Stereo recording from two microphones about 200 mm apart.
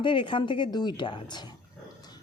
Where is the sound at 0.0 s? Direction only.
25° left (ahead or behind).